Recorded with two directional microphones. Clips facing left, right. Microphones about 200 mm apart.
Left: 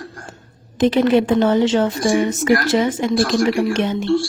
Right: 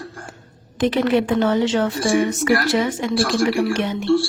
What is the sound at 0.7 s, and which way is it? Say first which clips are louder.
A woman's voice: left 3 dB; 25° left (ahead or behind).